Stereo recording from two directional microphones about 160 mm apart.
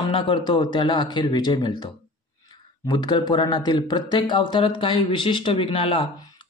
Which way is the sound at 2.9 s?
25° left (ahead or behind).